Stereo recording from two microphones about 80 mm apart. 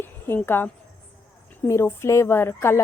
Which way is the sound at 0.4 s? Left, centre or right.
Left.